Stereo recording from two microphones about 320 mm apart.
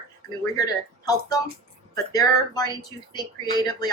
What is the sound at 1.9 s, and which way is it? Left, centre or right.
A woman's voice, centre.